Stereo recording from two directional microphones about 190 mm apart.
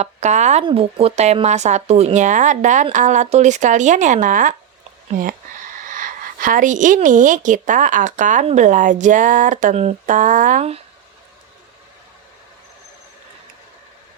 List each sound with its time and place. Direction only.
0.0 s speech: 40° right (ahead or behind)
5.9 s a woman's voice: 45° right (ahead or behind)